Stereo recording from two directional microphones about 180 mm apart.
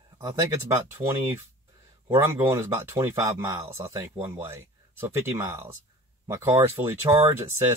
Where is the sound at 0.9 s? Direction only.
15° right (ahead or behind).